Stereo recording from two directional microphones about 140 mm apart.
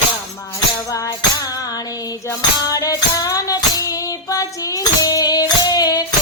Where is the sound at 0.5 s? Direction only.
25° left (ahead or behind).